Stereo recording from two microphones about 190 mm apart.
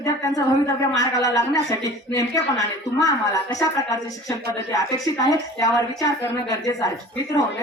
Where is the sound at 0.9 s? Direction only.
15° left (ahead or behind).